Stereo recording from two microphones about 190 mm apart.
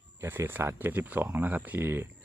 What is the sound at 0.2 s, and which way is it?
Speech, 10° right (ahead or behind).